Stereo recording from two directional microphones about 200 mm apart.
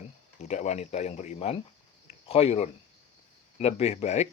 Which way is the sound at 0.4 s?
35° left (ahead or behind).